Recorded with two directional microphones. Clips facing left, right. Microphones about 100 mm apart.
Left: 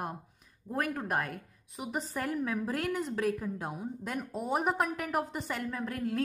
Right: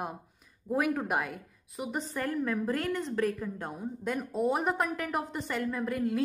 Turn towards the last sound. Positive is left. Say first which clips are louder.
# right 3 dB
turn(degrees=0)  # may be behind; listen again after turning